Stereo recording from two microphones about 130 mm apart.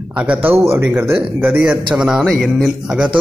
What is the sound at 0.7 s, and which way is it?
Speech, 20° right (ahead or behind).